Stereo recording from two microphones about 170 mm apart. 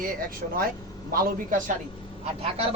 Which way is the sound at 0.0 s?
60° right (ahead or behind).